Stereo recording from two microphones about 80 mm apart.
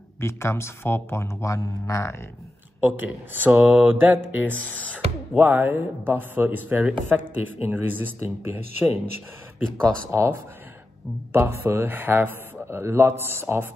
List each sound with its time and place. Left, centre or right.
0.2 s speech: left
2.8 s speech: right